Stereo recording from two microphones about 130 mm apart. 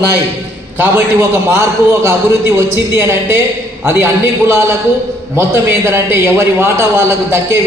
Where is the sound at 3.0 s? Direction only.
20° right (ahead or behind).